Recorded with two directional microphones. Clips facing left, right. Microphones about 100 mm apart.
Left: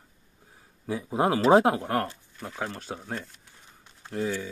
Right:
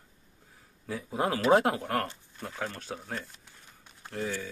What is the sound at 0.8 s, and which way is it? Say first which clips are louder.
Speech: left 5 dB; 25° left (ahead or behind).